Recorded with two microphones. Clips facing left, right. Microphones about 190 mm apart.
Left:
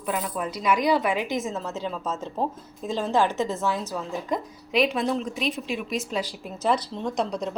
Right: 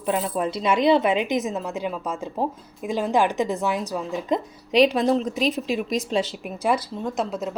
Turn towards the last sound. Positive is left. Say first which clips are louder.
# right 1 dB
turn(degrees=-5)  # may be behind; listen again after turning